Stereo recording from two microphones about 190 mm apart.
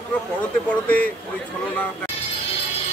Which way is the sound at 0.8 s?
10° left (ahead or behind).